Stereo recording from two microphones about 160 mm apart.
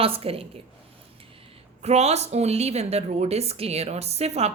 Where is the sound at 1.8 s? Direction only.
40° right (ahead or behind).